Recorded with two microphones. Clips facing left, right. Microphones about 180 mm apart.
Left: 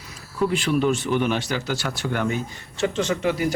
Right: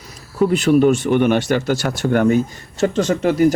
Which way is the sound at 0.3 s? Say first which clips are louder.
Right 8 dB; 45° right (ahead or behind).